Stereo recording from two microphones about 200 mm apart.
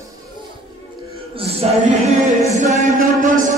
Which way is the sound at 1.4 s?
30° right (ahead or behind).